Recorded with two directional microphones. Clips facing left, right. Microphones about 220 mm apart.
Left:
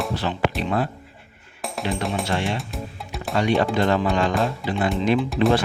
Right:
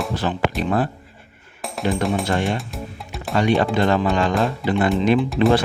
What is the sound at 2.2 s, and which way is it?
Speech, 50° right (ahead or behind).